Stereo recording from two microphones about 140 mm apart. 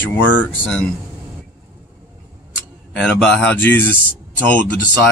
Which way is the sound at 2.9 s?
10° left (ahead or behind).